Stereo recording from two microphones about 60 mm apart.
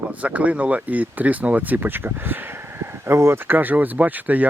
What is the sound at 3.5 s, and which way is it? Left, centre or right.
Speech, right.